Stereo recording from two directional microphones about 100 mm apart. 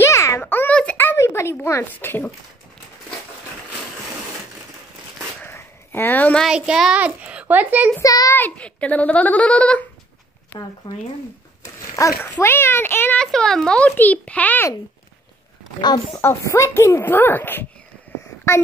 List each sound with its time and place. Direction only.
0.0 s a sound: 30° left (ahead or behind)
5.4 s a sound: 25° left (ahead or behind)
6.4 s a child's voice: 10° right (ahead or behind)
8.0 s a child's voice: 35° left (ahead or behind)
8.4 s a child's voice: 15° left (ahead or behind)
10.5 s speech: 50° left (ahead or behind)
11.6 s a sound: 35° left (ahead or behind)
12.2 s speech: 20° left (ahead or behind)
13.2 s a child's voice: 5° left (ahead or behind)
16.2 s speech: 25° left (ahead or behind)